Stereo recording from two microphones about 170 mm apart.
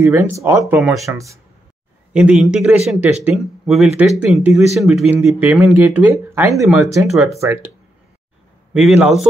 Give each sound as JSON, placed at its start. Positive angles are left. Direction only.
{"t": 0.0, "sound": "speech", "side_deg": -15}
{"t": 0.7, "sound": "speech", "side_deg": 0}
{"t": 1.1, "sound": "speech", "side_deg": -15}
{"t": 2.1, "sound": "speech", "side_deg": -5}
{"t": 6.5, "sound": "speech", "side_deg": 0}
{"t": 7.2, "sound": "speech", "side_deg": -15}
{"t": 8.7, "sound": "speech", "side_deg": -5}